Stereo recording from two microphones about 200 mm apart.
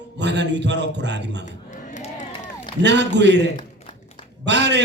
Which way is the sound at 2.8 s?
60° right (ahead or behind).